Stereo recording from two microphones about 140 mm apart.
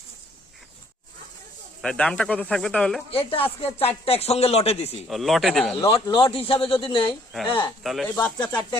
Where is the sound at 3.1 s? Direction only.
40° left (ahead or behind).